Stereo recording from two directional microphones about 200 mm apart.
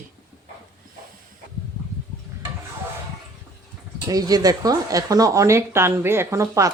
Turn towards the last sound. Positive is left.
turn(degrees=-15)  # may be behind; listen again after turning